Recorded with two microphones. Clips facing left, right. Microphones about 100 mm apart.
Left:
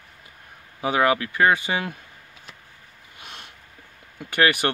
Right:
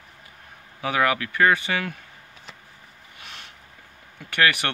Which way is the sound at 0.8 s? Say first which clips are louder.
Left 2 dB; 25° left (ahead or behind).